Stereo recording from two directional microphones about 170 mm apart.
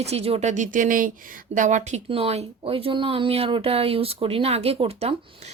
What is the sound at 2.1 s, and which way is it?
Speech, 35° right (ahead or behind).